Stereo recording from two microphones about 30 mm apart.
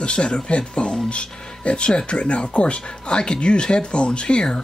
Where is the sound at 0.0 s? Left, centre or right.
Left.